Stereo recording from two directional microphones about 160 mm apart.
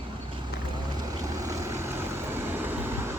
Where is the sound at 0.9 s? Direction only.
20° right (ahead or behind).